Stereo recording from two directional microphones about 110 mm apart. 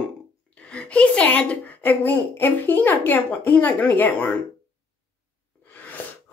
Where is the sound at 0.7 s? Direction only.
10° left (ahead or behind).